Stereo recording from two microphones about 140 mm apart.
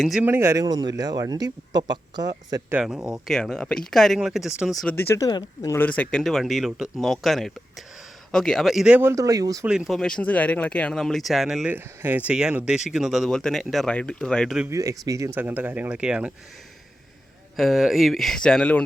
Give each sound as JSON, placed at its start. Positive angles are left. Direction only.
{"t": 0.0, "sound": "speech", "side_deg": 0}
{"t": 0.3, "sound": "speech", "side_deg": -20}
{"t": 2.8, "sound": "speech", "side_deg": -5}
{"t": 4.9, "sound": "speech", "side_deg": 20}
{"t": 5.7, "sound": "speech", "side_deg": 10}
{"t": 9.0, "sound": "speech", "side_deg": -20}
{"t": 9.6, "sound": "speech", "side_deg": -5}
{"t": 14.7, "sound": "speech", "side_deg": -25}
{"t": 17.6, "sound": "speech", "side_deg": 0}